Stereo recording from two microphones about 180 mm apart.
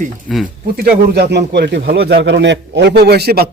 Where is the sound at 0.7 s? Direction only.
60° right (ahead or behind).